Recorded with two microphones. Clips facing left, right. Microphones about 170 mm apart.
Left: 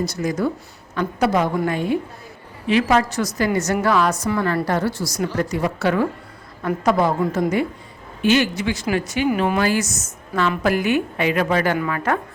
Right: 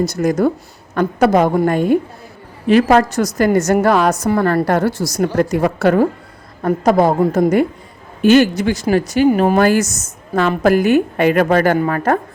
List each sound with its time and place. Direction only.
0.0 s speech: 45° right (ahead or behind)